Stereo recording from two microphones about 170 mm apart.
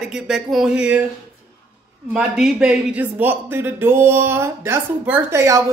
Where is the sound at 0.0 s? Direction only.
Centre (ahead or behind).